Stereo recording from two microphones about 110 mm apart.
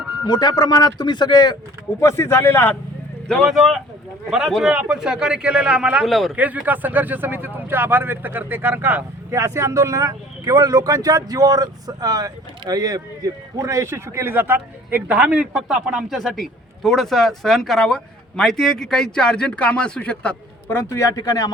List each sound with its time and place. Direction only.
0.3 s speech: 40° left (ahead or behind)
2.0 s a man's voice: 25° left (ahead or behind)
3.2 s speech: 5° left (ahead or behind)
6.3 s speech: 15° right (ahead or behind); by 21.5 s 35° left (ahead or behind)